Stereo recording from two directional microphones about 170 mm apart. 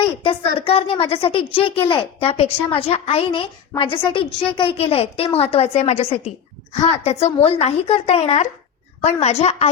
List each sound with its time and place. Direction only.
0.2 s a woman's voice: 30° left (ahead or behind)